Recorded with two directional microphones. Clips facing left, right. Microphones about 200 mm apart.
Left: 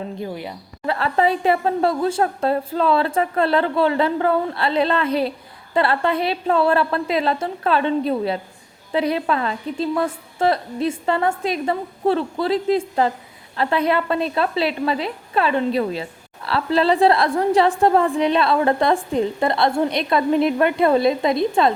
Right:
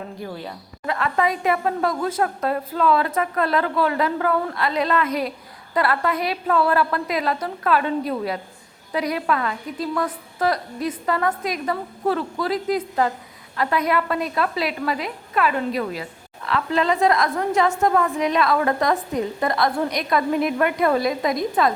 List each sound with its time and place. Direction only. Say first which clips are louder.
0.2 s a woman's voice: left 3 dB; 15° left (ahead or behind)
0.9 s a woman's voice: left 3 dB; 30° left (ahead or behind)